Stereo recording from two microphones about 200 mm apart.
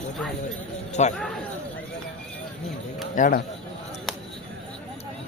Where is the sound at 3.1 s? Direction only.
40° left (ahead or behind).